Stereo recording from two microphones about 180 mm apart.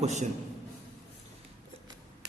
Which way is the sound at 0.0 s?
40° right (ahead or behind).